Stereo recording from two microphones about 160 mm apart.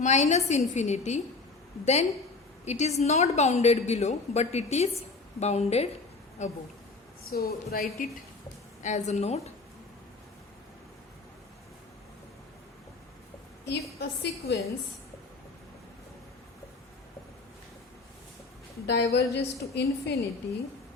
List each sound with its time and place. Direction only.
0.0 s a woman's voice: 50° left (ahead or behind)
7.3 s speech: 70° left (ahead or behind)
8.8 s a woman's voice: 50° left (ahead or behind)
13.7 s a woman's voice: 90° left
18.9 s a woman's voice: 90° left